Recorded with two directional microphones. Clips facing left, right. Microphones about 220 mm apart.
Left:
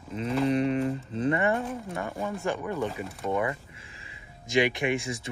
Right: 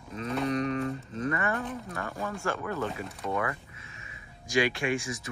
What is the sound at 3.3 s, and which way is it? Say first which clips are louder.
Speech: left 3 dB; 20° left (ahead or behind).